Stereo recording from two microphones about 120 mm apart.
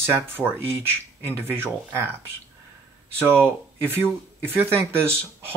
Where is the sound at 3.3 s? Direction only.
20° right (ahead or behind).